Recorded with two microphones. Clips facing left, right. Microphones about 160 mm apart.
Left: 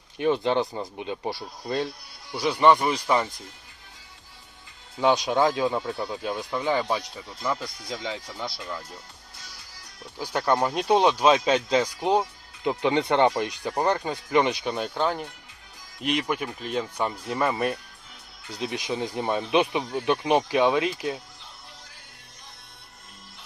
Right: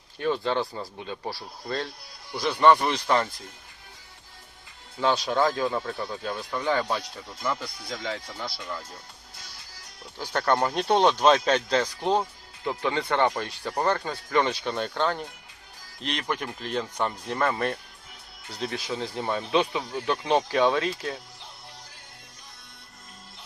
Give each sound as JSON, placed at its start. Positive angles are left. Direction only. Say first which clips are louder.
{"t": 0.2, "sound": "speech", "louder": "left 3 dB", "side_deg": 20}
{"t": 4.9, "sound": "speech", "louder": "left 2 dB", "side_deg": 15}
{"t": 10.2, "sound": "speech", "louder": "left 1 dB", "side_deg": 10}